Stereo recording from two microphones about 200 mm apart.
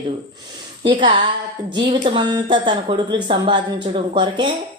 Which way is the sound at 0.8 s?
25° right (ahead or behind).